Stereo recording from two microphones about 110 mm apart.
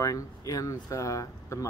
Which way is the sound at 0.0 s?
30° left (ahead or behind).